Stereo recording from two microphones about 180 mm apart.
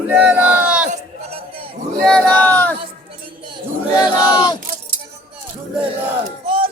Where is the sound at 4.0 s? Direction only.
20° left (ahead or behind).